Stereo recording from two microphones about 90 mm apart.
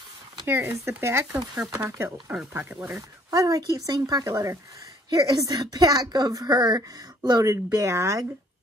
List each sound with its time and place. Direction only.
0.5 s speech: 25° right (ahead or behind)
3.3 s a woman's voice: 40° right (ahead or behind)
7.5 s a woman's voice: 35° right (ahead or behind)